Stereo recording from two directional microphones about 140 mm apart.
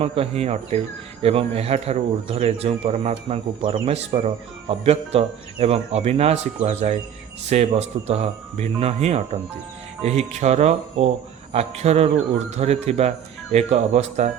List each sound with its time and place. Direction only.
0.0 s speech: 45° right (ahead or behind)